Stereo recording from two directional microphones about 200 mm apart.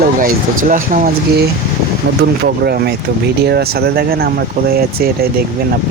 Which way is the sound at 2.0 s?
55° right (ahead or behind).